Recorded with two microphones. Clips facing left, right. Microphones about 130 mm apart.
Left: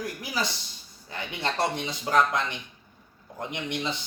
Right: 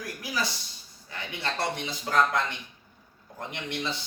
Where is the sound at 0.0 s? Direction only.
20° left (ahead or behind).